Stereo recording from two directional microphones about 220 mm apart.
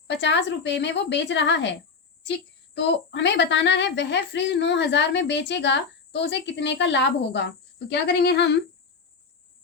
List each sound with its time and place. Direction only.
0.1 s a woman's voice: 55° left (ahead or behind)
2.7 s a woman's voice: 50° left (ahead or behind)